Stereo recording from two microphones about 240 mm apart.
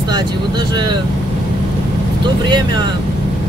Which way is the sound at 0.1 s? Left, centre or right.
Centre.